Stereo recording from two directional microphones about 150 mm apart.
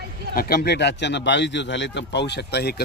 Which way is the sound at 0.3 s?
90° left.